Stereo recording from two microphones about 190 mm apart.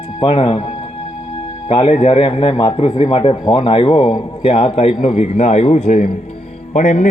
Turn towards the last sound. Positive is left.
turn(degrees=40)  # may be behind; listen again after turning